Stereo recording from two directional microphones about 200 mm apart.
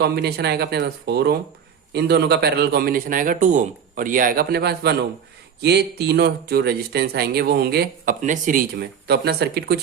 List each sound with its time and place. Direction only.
0.0 s speech: 55° right (ahead or behind)
8.2 s speech: 40° right (ahead or behind)